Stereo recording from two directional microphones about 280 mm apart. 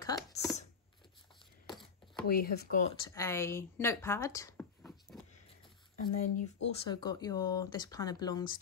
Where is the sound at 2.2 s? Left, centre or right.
Left.